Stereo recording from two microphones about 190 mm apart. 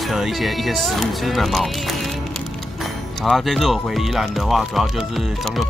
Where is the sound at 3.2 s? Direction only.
Centre (ahead or behind).